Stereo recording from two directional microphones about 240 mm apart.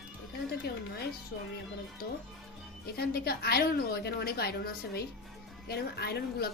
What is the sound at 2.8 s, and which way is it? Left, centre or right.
A woman's voice, left.